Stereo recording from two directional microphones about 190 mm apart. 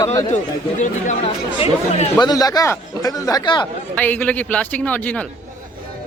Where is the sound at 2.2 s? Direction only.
20° left (ahead or behind).